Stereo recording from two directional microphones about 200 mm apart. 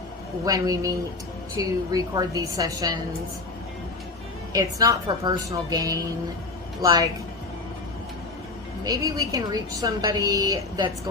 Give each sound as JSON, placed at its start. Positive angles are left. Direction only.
{"t": 0.4, "sound": "a woman's voice", "side_deg": -20}
{"t": 4.5, "sound": "a woman's voice", "side_deg": -15}
{"t": 8.8, "sound": "a woman's voice", "side_deg": -20}